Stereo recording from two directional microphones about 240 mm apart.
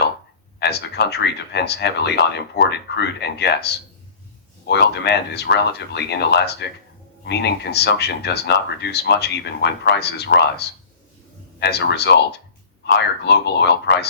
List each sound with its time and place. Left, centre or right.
0.6 s speech: left